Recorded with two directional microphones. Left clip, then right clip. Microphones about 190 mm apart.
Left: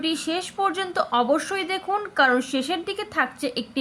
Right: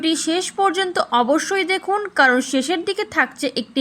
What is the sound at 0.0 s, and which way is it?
Speech, 25° right (ahead or behind).